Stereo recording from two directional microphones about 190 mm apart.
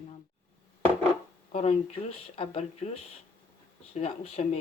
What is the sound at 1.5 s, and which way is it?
Speech, 30° left (ahead or behind).